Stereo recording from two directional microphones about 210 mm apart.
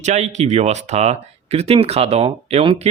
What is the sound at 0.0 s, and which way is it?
Speech, 35° right (ahead or behind).